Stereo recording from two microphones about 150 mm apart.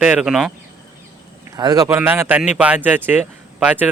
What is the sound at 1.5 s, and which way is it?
Speech, 25° right (ahead or behind).